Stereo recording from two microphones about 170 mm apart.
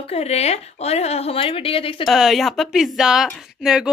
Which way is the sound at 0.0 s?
40° left (ahead or behind).